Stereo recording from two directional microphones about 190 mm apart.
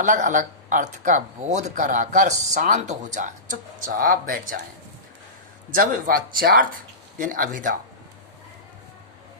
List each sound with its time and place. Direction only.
0.0 s speech: 40° right (ahead or behind)
5.7 s speech: 45° right (ahead or behind)